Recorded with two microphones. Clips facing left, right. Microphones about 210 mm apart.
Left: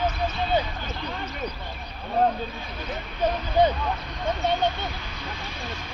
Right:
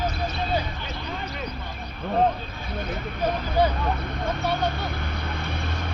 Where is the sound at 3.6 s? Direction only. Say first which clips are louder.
Left 2 dB; 20° left (ahead or behind).